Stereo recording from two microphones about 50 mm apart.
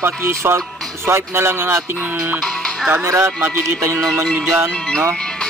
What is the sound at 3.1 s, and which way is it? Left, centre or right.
Music, right.